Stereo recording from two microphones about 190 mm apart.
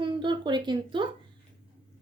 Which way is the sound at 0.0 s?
25° right (ahead or behind).